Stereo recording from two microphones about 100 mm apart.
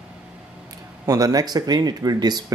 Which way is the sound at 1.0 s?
35° right (ahead or behind).